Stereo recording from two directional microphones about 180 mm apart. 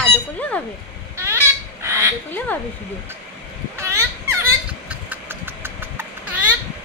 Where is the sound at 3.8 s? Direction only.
15° right (ahead or behind).